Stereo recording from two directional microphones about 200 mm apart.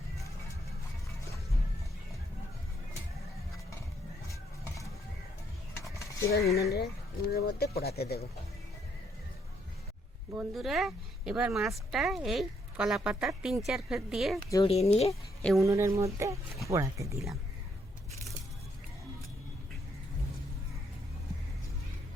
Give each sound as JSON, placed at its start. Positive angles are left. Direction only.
{"t": 4.3, "sound": "a sound", "side_deg": 15}
{"t": 6.0, "sound": "cutlery", "side_deg": 15}
{"t": 6.6, "sound": "speech", "side_deg": 50}
{"t": 10.3, "sound": "speech", "side_deg": 0}
{"t": 14.5, "sound": "speech", "side_deg": 30}
{"t": 15.4, "sound": "speech", "side_deg": 5}
{"t": 15.6, "sound": "speech", "side_deg": -15}